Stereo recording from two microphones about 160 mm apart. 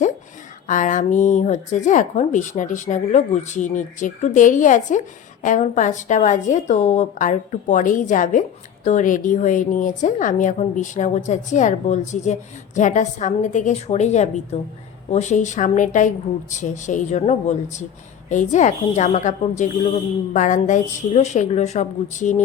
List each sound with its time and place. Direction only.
0.7 s speech: 55° left (ahead or behind)